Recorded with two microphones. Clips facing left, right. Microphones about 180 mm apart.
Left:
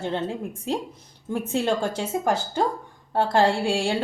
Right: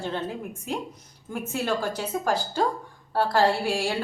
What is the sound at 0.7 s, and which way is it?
A woman's voice, 30° left (ahead or behind).